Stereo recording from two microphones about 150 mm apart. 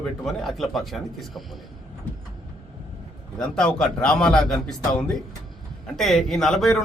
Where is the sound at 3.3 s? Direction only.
5° left (ahead or behind).